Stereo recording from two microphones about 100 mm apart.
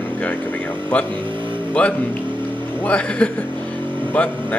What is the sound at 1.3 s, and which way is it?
Speech, 55° right (ahead or behind).